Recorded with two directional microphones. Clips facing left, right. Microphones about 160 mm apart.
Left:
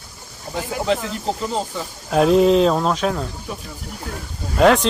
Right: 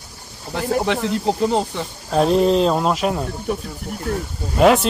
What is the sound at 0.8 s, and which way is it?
Speech, 70° right (ahead or behind).